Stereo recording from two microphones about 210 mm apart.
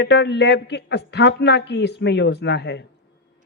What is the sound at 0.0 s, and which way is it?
A woman's voice, 55° left (ahead or behind).